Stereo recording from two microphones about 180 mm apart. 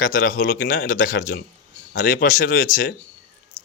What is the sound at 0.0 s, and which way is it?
Speech, 50° left (ahead or behind).